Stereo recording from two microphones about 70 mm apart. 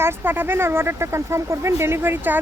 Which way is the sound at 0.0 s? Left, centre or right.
Right.